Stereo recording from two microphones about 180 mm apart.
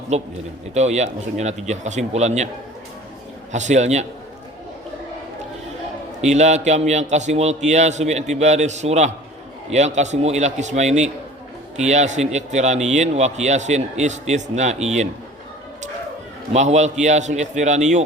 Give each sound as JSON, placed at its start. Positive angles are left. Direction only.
{"t": 0.1, "sound": "a man's voice", "side_deg": -40}
{"t": 3.5, "sound": "a man's voice", "side_deg": -40}
{"t": 6.2, "sound": "a man's voice", "side_deg": -40}
{"t": 16.5, "sound": "a man's voice", "side_deg": -40}